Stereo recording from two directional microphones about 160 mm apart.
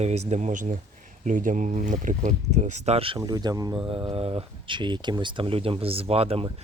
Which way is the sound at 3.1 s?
25° right (ahead or behind).